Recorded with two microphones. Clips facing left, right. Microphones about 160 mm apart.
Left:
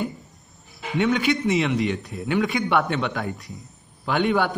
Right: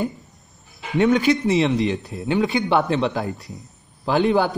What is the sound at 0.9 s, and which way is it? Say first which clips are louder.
Speech: right 4 dB; 40° right (ahead or behind).